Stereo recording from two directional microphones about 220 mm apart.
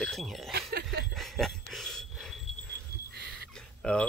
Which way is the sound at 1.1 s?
Centre (ahead or behind).